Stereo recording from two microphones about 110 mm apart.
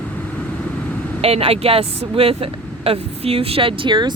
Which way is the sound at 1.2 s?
65° right (ahead or behind).